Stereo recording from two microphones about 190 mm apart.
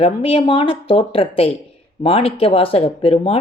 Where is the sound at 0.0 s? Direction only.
30° left (ahead or behind).